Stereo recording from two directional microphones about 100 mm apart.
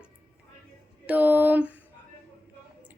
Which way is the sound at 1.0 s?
15° right (ahead or behind).